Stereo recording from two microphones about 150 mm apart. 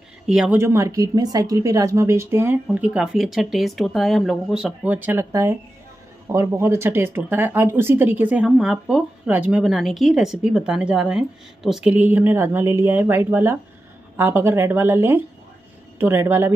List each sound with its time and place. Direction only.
0.3 s speech: 5° right (ahead or behind)
0.6 s speech: 20° right (ahead or behind)